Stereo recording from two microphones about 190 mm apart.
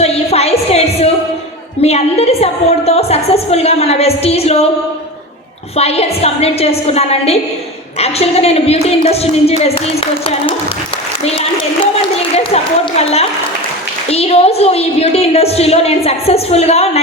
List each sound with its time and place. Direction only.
0.0 s a sound: 35° left (ahead or behind)
1.8 s a woman's voice: 30° left (ahead or behind)
5.7 s a woman's voice: 35° left (ahead or behind)
13.0 s a woman's voice: 35° left (ahead or behind)